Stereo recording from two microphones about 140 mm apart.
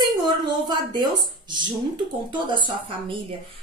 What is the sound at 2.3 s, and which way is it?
Speech, 35° right (ahead or behind).